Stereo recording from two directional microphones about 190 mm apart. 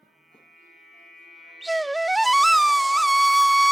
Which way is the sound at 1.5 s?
Centre (ahead or behind).